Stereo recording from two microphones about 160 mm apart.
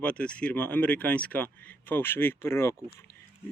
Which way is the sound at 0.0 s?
5° left (ahead or behind).